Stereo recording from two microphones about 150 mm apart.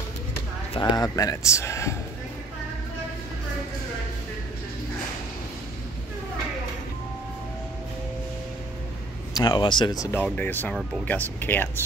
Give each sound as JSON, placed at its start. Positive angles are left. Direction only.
{"t": 0.7, "sound": "speech", "side_deg": 25}
{"t": 9.3, "sound": "speech", "side_deg": 30}
{"t": 10.1, "sound": "speech", "side_deg": 10}